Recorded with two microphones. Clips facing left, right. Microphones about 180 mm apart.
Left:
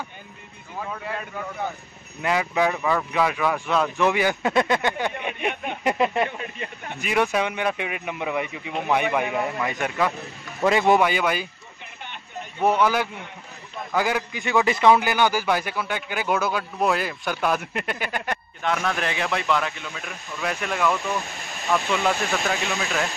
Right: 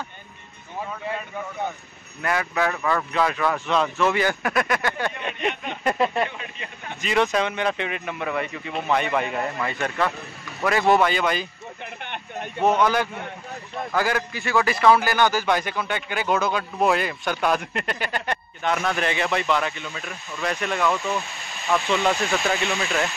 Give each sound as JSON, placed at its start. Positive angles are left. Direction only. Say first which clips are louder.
{"t": 2.2, "sound": "speech", "louder": "left 2 dB", "side_deg": 15}
{"t": 12.0, "sound": "a sound", "louder": "right 2 dB", "side_deg": -60}
{"t": 12.5, "sound": "a man's voice", "louder": "even", "side_deg": 10}